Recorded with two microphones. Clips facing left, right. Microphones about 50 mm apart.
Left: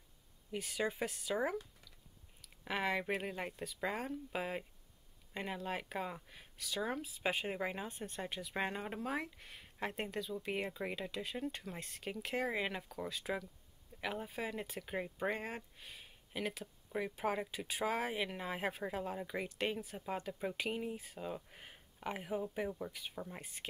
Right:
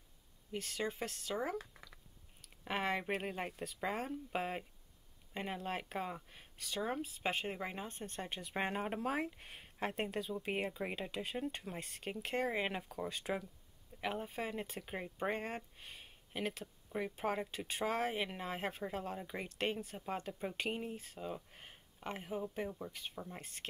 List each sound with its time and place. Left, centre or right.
0.6 s speech: centre
2.8 s speech: centre
8.7 s speech: centre
9.8 s speech: centre
10.1 s speech: centre
18.1 s speech: centre
18.5 s speech: centre